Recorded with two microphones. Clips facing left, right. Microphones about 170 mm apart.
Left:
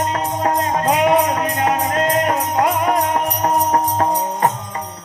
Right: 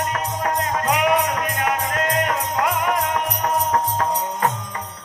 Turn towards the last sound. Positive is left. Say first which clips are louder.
# left 4 dB
turn(degrees=30)  # may be behind; listen again after turning